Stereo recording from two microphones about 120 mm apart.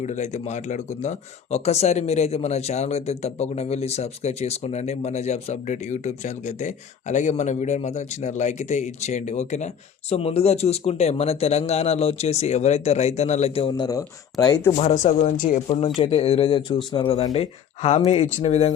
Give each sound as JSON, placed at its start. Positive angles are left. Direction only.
{"t": 0.0, "sound": "speech", "side_deg": 75}
{"t": 10.1, "sound": "speech", "side_deg": 55}
{"t": 13.7, "sound": "speech", "side_deg": 35}
{"t": 14.8, "sound": "speech", "side_deg": 80}
{"t": 16.0, "sound": "speech", "side_deg": 50}
{"t": 17.4, "sound": "speech", "side_deg": 65}